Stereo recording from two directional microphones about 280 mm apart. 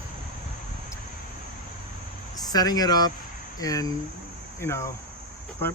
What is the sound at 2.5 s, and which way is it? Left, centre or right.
Speech, centre.